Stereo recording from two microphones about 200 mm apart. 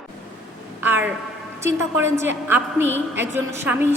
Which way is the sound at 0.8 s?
10° right (ahead or behind).